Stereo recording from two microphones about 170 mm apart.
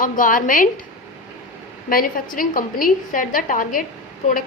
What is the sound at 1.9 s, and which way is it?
A woman's voice, 55° left (ahead or behind).